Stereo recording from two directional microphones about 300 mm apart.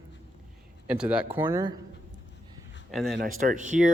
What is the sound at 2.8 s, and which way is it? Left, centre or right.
Speech, centre.